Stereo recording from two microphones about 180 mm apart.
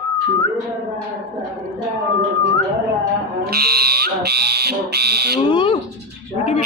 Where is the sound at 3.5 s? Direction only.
60° right (ahead or behind).